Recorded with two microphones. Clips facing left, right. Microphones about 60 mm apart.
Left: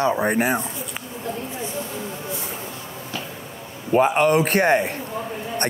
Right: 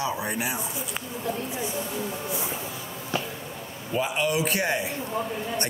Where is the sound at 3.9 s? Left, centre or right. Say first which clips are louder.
Left 9 dB; left.